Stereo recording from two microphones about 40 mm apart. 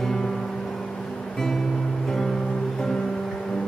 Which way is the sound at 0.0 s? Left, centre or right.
Centre.